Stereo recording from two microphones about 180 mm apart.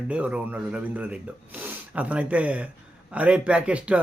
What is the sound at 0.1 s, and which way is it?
Speech, 5° right (ahead or behind).